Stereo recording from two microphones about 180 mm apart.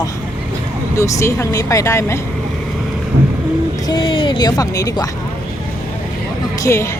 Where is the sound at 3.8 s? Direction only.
25° left (ahead or behind).